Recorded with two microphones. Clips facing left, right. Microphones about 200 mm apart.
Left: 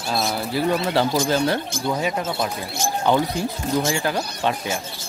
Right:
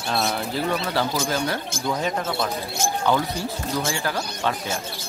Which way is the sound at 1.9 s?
10° left (ahead or behind).